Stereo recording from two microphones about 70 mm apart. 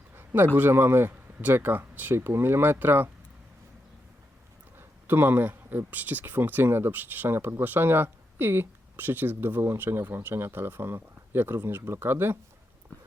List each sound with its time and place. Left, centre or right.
0.1 s a sound: right
0.5 s speech: right
4.8 s speech: right